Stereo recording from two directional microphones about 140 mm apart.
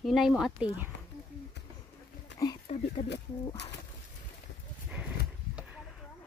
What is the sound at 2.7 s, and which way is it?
Speech, 50° left (ahead or behind).